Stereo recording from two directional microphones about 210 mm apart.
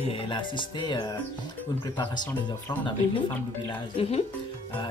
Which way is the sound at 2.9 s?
20° left (ahead or behind).